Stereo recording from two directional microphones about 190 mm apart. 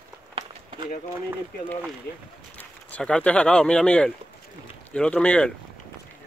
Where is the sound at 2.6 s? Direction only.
5° left (ahead or behind).